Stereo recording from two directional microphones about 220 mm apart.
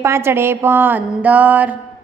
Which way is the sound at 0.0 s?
10° right (ahead or behind).